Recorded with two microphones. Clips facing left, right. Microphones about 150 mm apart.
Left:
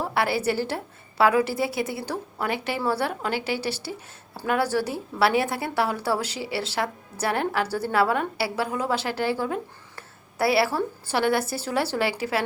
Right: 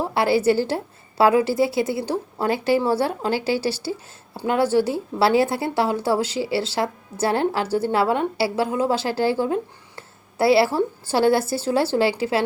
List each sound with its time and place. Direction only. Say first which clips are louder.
0.0 s a woman's voice: right 5 dB; 30° right (ahead or behind)